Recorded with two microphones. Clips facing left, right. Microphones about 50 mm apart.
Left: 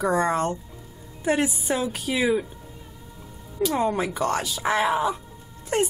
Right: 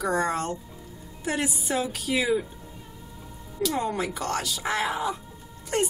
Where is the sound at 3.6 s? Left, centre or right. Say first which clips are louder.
Left 4 dB; left.